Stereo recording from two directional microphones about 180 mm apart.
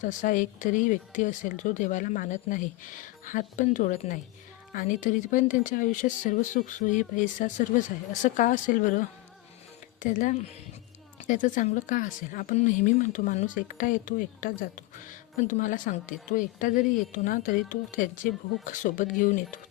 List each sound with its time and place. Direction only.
0.0 s a woman's voice: 45° left (ahead or behind)